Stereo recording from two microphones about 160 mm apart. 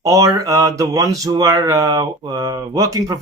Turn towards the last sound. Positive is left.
turn(degrees=-20)  # may be behind; listen again after turning